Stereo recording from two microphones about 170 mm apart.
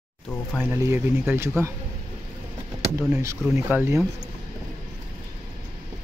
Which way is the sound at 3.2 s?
15° right (ahead or behind).